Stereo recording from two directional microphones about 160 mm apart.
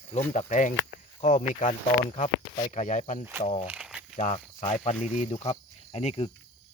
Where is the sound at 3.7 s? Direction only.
5° right (ahead or behind).